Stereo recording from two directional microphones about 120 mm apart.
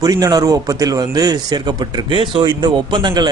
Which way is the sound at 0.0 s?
30° right (ahead or behind).